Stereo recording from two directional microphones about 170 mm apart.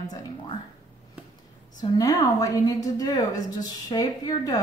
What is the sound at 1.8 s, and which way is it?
A woman's voice, 20° left (ahead or behind).